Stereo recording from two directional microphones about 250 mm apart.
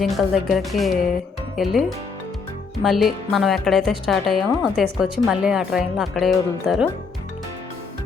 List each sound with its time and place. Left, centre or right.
0.0 s speech: centre
2.8 s speech: centre